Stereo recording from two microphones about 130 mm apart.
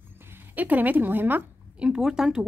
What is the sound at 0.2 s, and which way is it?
A woman's voice, 15° right (ahead or behind).